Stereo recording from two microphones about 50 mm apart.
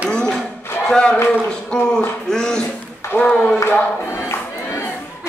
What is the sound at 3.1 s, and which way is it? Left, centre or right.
Speech, left.